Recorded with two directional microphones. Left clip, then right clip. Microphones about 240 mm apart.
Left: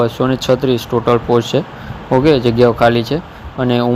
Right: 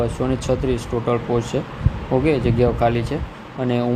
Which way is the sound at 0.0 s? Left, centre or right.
Centre.